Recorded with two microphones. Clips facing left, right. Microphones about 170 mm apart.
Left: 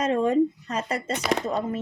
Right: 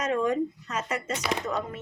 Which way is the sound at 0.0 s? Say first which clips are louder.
Left 5 dB; 30° left (ahead or behind).